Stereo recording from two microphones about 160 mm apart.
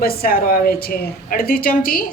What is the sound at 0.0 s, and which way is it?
A woman's voice, 65° left (ahead or behind).